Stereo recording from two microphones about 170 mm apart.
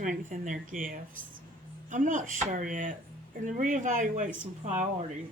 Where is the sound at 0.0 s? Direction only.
50° right (ahead or behind).